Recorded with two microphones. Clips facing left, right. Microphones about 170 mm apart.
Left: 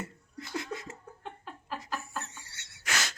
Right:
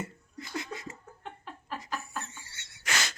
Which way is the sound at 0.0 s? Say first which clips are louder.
Right 1 dB; centre (ahead or behind).